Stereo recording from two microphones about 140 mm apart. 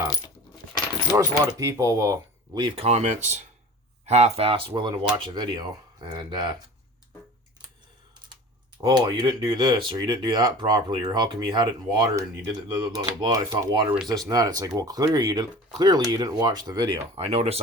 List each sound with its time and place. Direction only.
1.1 s speech: 25° right (ahead or behind)
2.6 s speech: 35° right (ahead or behind)
2.8 s speech: 55° right (ahead or behind); by 6.6 s 30° right (ahead or behind)
8.8 s speech: 30° right (ahead or behind)
17.2 s speech: 45° right (ahead or behind)